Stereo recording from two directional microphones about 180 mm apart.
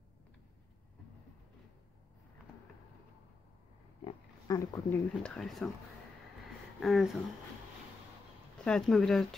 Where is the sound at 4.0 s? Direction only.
30° left (ahead or behind).